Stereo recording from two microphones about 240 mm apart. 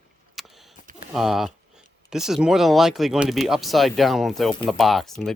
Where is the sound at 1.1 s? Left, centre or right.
Centre.